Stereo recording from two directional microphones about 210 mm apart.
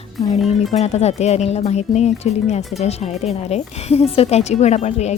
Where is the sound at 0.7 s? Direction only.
30° left (ahead or behind).